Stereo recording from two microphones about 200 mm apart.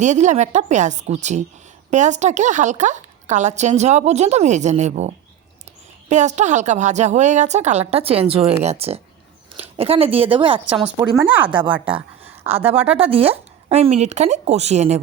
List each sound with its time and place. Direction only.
0.0 s a woman's voice: 35° right (ahead or behind)
10.7 s speech: 5° right (ahead or behind)
12.5 s a woman's voice: 30° right (ahead or behind)